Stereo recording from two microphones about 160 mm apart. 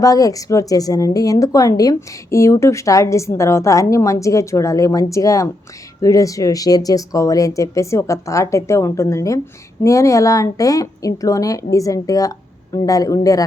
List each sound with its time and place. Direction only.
0.0 s speech: 20° left (ahead or behind)